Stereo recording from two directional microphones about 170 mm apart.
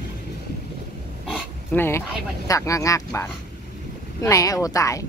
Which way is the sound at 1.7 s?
15° left (ahead or behind).